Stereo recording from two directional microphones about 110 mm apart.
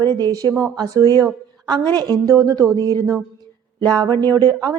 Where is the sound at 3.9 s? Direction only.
35° right (ahead or behind).